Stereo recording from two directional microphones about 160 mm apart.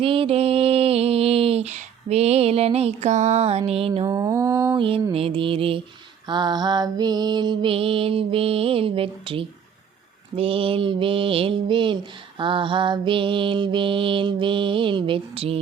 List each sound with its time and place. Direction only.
0.0 s mantra: 35° right (ahead or behind)
4.0 s mantra: 20° right (ahead or behind)
5.1 s mantra: 35° right (ahead or behind)